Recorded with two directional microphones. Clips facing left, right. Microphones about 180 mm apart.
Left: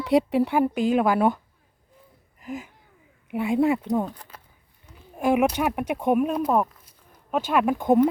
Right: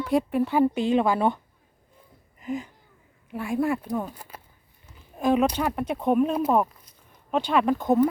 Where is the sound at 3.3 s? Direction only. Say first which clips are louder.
Left 4 dB; 20° left (ahead or behind).